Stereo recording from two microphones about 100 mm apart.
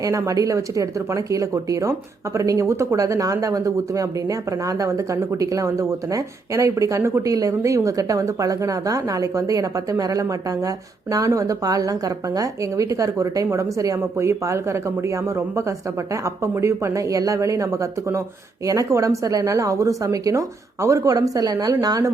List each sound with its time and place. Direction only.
0.0 s speech: 35° right (ahead or behind)